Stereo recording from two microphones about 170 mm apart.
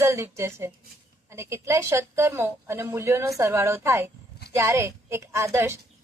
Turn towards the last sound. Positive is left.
turn(degrees=-15)  # may be behind; listen again after turning